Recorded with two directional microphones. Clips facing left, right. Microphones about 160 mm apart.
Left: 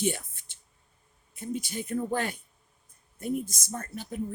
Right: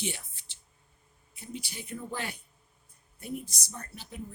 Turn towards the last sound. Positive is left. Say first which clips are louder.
# left 8 dB
turn(degrees=50)  # may be behind; listen again after turning